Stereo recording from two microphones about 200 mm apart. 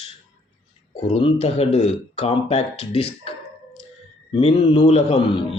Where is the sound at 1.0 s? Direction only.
35° left (ahead or behind).